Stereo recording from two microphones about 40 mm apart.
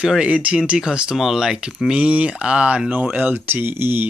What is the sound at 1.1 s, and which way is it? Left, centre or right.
Speech, centre.